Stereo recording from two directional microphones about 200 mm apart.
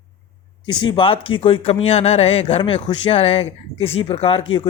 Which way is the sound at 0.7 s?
25° left (ahead or behind).